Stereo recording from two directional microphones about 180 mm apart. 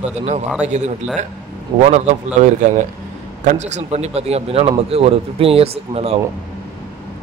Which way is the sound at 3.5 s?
40° right (ahead or behind).